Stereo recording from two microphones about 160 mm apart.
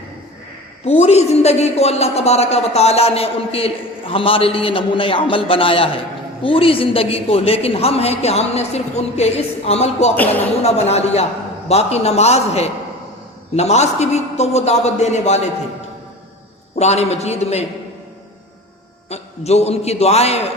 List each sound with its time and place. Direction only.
0.9 s a man's voice: 40° left (ahead or behind)
16.7 s a man's voice: 45° left (ahead or behind)
19.1 s a man's voice: 40° left (ahead or behind)